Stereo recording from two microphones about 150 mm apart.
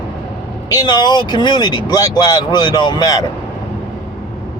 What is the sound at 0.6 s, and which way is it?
Speech, 25° left (ahead or behind).